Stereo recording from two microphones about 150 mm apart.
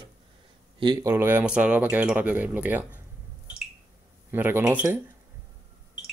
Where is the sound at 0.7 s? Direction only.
30° right (ahead or behind).